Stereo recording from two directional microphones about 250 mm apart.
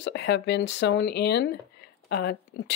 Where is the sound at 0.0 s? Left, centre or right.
Left.